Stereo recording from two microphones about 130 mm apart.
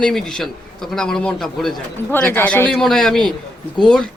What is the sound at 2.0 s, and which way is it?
Speech, 15° left (ahead or behind).